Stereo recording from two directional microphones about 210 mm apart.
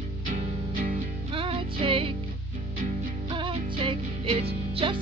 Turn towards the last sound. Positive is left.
turn(degrees=-25)  # may be behind; listen again after turning